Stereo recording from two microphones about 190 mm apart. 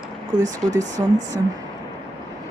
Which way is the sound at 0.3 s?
40° right (ahead or behind).